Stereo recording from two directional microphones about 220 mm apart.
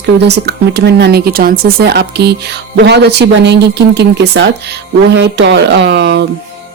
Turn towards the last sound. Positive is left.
turn(degrees=-50)  # may be behind; listen again after turning